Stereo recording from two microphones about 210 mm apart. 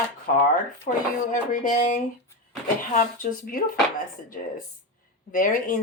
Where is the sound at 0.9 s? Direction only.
40° left (ahead or behind).